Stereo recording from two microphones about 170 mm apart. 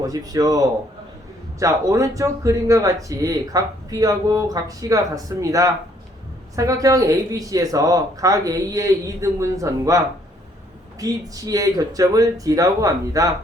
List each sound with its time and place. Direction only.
0.0 s speech: 20° right (ahead or behind)
11.0 s speech: 20° right (ahead or behind)